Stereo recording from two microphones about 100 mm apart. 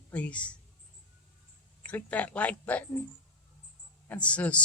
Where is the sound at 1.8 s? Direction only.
15° left (ahead or behind).